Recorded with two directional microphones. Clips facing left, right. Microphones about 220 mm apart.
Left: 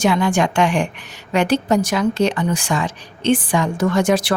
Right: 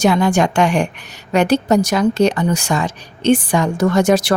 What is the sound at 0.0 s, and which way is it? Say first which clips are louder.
A woman's voice: right 3 dB; 40° right (ahead or behind).